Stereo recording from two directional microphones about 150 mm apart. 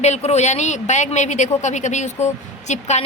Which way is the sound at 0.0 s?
45° left (ahead or behind).